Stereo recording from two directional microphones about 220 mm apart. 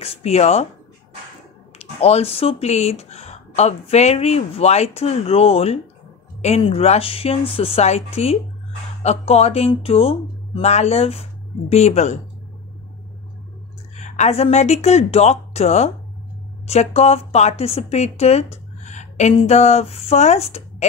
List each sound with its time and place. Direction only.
0.0 s speech: 30° left (ahead or behind)
1.8 s speech: 30° left (ahead or behind)
13.9 s speech: 30° left (ahead or behind)